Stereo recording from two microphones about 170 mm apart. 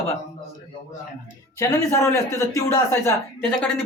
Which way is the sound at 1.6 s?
20° left (ahead or behind).